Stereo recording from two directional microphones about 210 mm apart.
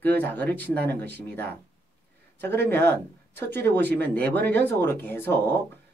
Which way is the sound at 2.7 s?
10° left (ahead or behind).